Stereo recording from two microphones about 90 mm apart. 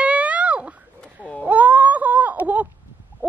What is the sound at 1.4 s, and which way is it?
Wail, 15° right (ahead or behind).